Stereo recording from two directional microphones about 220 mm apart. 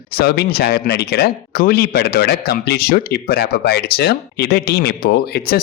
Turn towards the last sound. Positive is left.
turn(degrees=45)  # may be behind; listen again after turning